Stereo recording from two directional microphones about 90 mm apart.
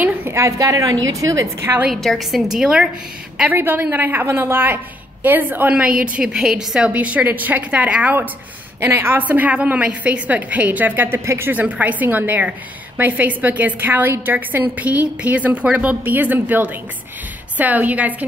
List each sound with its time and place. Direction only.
0.0 s a sound: 20° right (ahead or behind)
0.4 s a woman's voice: 40° right (ahead or behind)
1.9 s a woman's voice: centre (ahead or behind)
3.4 s a woman's voice: 25° right (ahead or behind)
11.6 s a woman's voice: 15° right (ahead or behind)